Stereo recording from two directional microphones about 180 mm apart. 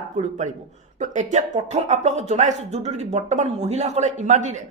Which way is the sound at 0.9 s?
40° right (ahead or behind).